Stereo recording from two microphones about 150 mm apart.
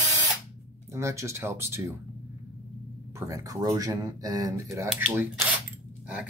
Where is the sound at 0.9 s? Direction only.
20° right (ahead or behind).